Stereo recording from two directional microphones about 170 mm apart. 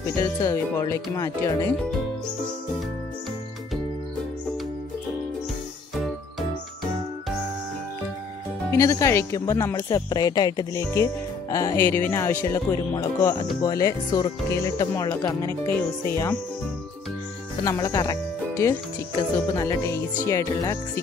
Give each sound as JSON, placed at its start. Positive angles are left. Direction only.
{"t": 0.0, "sound": "speech", "side_deg": 20}
{"t": 8.7, "sound": "speech", "side_deg": 20}
{"t": 17.6, "sound": "speech", "side_deg": 20}